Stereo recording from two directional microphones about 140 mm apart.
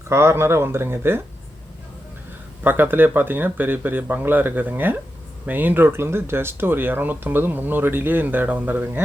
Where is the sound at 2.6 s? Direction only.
15° right (ahead or behind).